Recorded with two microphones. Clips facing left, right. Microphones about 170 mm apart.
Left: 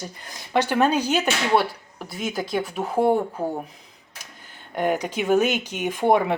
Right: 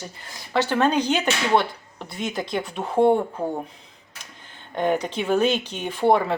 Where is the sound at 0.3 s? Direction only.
15° left (ahead or behind).